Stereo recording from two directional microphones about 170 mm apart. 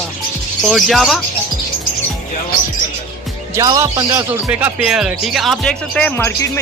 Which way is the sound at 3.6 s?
20° right (ahead or behind).